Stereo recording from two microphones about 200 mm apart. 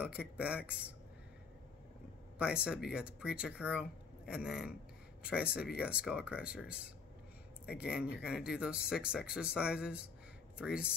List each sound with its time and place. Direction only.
0.0 s speech: 5° right (ahead or behind)
2.3 s speech: 5° right (ahead or behind)